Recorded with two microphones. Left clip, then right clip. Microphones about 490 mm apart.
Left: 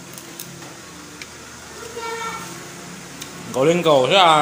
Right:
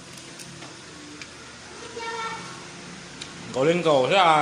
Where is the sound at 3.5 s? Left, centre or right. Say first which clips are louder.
Left 5 dB; right.